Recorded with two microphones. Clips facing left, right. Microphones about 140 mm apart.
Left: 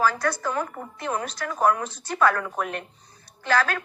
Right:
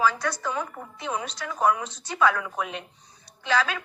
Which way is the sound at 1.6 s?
50° left (ahead or behind).